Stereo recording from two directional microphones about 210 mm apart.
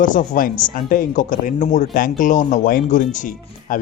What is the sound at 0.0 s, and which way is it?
Speech, 40° left (ahead or behind).